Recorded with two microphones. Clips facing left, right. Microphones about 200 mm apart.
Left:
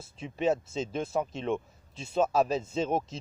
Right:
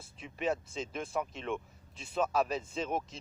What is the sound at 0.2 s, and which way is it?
Speech, 30° left (ahead or behind).